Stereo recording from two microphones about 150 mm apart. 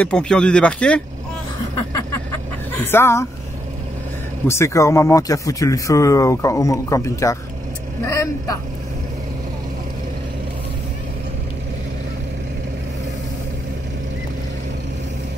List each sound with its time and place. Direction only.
0.0 s speech: 5° left (ahead or behind)
2.1 s a sound: 15° left (ahead or behind)
4.5 s speech: 20° left (ahead or behind)